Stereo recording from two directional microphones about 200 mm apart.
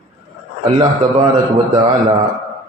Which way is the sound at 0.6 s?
25° right (ahead or behind).